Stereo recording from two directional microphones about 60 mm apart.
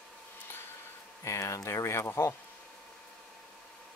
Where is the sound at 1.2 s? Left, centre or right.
Left.